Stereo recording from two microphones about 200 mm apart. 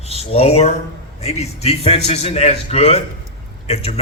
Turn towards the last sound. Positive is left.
turn(degrees=30)  # may be behind; listen again after turning